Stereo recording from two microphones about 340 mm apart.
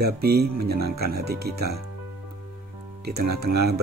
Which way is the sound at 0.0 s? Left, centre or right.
Right.